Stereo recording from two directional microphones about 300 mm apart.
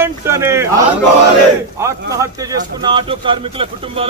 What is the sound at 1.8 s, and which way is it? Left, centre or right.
Speech, centre.